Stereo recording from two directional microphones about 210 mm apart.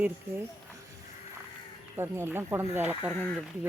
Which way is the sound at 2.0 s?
10° right (ahead or behind).